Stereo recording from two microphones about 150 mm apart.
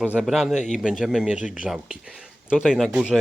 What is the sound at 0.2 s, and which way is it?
Speech, centre (ahead or behind).